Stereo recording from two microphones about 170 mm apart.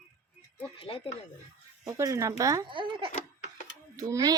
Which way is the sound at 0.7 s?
30° left (ahead or behind).